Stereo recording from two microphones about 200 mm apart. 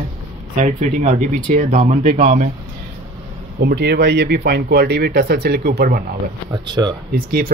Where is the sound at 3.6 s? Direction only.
55° right (ahead or behind).